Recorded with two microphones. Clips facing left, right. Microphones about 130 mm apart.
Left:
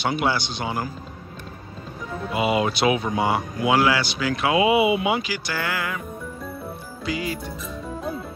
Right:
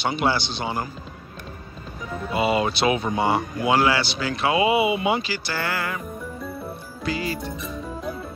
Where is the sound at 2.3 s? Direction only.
10° left (ahead or behind).